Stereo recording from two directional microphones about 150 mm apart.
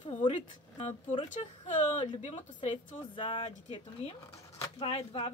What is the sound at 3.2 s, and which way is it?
Speech, 35° left (ahead or behind).